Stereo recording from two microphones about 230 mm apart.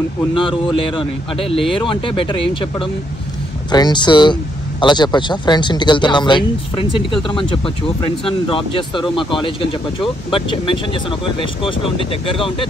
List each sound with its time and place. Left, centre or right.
0.3 s speech: left